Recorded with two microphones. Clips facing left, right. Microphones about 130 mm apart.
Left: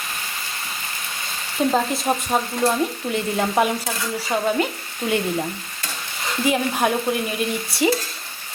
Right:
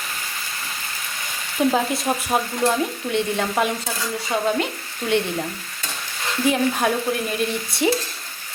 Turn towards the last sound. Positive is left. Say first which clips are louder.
# left 1 dB
turn(degrees=0)  # may be behind; listen again after turning